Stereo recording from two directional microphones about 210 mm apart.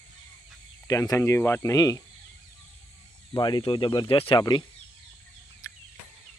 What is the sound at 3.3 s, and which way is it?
Speech, 20° left (ahead or behind).